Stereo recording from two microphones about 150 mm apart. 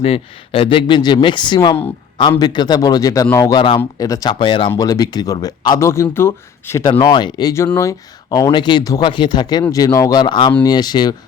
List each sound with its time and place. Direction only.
0.0 s speech: 40° left (ahead or behind)
4.7 s speech: 25° left (ahead or behind)
7.0 s speech: 30° left (ahead or behind)